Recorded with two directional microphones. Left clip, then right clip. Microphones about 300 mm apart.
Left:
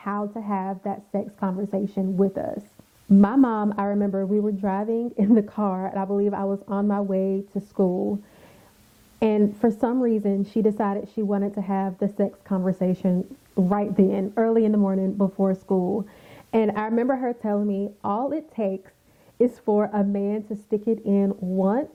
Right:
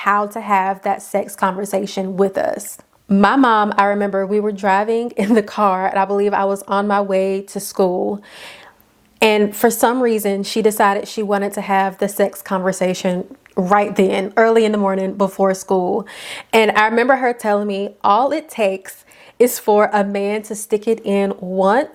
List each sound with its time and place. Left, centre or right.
0.0 s a woman's voice: centre
7.9 s speech: right
9.1 s a woman's voice: centre
16.2 s a woman's voice: centre